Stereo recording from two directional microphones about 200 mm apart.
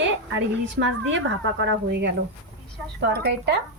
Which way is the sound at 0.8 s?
70° right (ahead or behind).